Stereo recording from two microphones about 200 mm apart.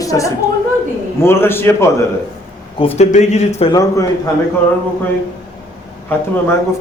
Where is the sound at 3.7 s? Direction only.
15° left (ahead or behind).